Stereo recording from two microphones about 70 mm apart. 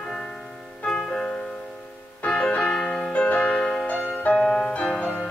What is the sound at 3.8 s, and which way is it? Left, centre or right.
Music, left.